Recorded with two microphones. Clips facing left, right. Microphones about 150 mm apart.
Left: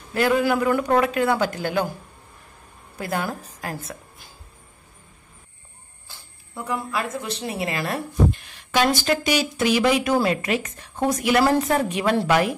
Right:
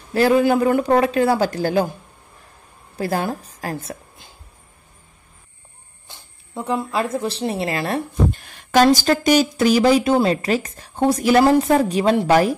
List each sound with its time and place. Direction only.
0.1 s speech: 30° right (ahead or behind)
3.0 s a woman's voice: 30° right (ahead or behind)
6.0 s speech: 20° right (ahead or behind)
8.3 s a woman's voice: 45° right (ahead or behind)